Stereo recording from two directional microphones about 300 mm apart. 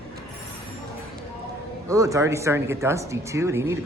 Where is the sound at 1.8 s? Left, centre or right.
Centre.